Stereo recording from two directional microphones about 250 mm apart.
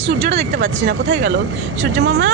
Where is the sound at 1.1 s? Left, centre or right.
Right.